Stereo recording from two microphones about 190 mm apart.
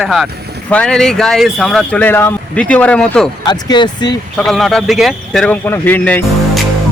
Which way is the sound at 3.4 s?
20° left (ahead or behind).